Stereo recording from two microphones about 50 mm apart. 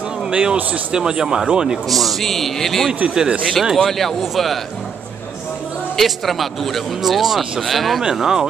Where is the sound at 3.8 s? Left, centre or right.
Centre.